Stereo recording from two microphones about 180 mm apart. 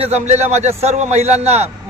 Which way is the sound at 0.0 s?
40° right (ahead or behind).